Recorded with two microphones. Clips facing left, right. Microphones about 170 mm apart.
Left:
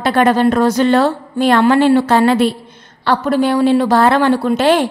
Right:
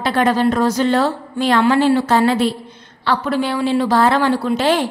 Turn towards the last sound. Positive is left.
turn(degrees=50)  # may be behind; listen again after turning